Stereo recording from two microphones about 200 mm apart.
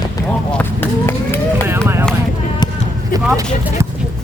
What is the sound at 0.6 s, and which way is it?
Run, 10° left (ahead or behind).